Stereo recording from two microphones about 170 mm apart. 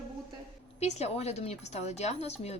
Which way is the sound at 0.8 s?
40° left (ahead or behind).